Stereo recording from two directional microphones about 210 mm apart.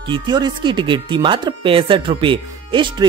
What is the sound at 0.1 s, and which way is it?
Speech, 20° right (ahead or behind).